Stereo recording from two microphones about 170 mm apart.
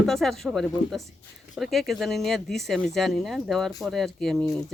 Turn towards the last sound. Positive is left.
turn(degrees=0)  # may be behind; listen again after turning